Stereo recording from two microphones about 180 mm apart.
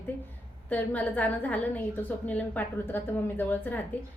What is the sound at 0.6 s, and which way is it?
A woman's voice, 10° left (ahead or behind).